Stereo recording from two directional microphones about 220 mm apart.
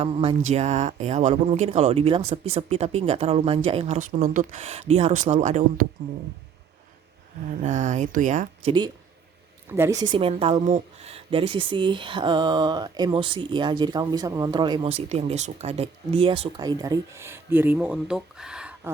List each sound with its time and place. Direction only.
0.0 s speech: 25° right (ahead or behind)
7.6 s speech: 35° right (ahead or behind)
9.6 s speech: 10° right (ahead or behind)